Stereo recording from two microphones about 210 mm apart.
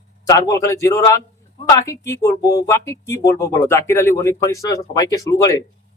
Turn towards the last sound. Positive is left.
turn(degrees=15)  # may be behind; listen again after turning